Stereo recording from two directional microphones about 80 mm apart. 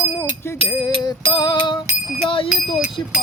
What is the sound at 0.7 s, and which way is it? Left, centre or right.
Music, left.